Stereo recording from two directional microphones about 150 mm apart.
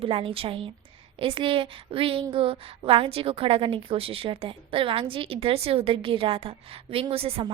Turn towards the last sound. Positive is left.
turn(degrees=-40)  # may be behind; listen again after turning